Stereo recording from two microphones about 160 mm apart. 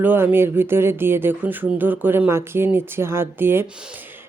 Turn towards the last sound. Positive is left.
turn(degrees=-15)  # may be behind; listen again after turning